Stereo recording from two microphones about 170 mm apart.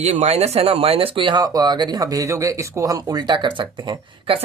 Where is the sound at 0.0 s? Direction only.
40° right (ahead or behind).